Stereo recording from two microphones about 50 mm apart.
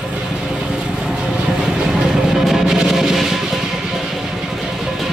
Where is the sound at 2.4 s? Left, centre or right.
Centre.